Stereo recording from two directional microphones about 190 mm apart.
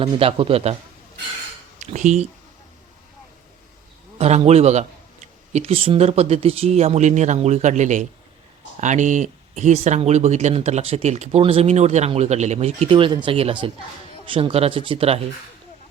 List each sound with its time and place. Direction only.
0.0 s speech: 30° right (ahead or behind)
1.8 s speech: 40° right (ahead or behind)
4.2 s speech: 35° right (ahead or behind)